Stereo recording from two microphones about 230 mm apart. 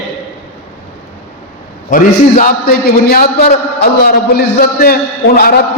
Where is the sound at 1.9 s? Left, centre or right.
Left.